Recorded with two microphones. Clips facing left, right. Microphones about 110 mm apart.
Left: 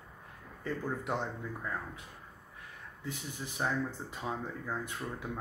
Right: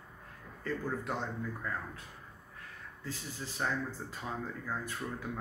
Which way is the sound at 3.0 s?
20° left (ahead or behind).